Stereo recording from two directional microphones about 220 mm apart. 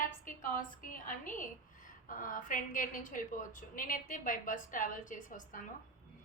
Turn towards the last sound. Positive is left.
turn(degrees=35)  # may be behind; listen again after turning